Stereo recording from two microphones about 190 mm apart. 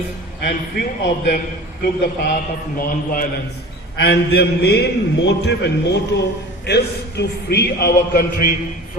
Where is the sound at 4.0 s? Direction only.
60° left (ahead or behind).